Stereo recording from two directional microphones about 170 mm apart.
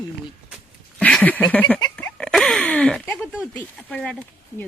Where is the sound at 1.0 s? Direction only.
10° left (ahead or behind).